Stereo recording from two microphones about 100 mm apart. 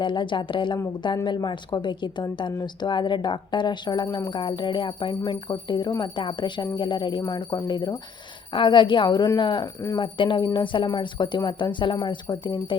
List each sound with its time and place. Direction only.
0.0 s a woman's voice: 50° left (ahead or behind)
8.5 s a woman's voice: 55° left (ahead or behind)